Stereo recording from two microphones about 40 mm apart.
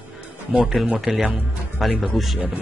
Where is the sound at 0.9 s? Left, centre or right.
Centre.